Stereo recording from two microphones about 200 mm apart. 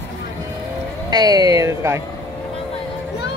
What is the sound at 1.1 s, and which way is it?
Speech, 20° right (ahead or behind).